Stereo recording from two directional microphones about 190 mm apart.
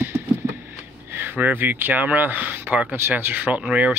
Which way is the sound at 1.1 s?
10° right (ahead or behind).